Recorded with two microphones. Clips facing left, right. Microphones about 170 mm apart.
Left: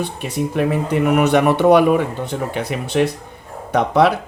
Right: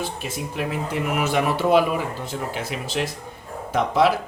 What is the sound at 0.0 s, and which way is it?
Speech, centre (ahead or behind).